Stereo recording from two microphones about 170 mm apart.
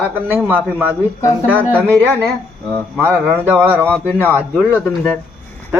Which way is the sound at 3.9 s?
5° left (ahead or behind).